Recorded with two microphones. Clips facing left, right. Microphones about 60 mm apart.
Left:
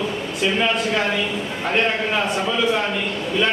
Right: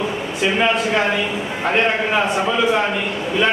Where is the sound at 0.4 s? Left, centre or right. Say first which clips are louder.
Right 3 dB; centre.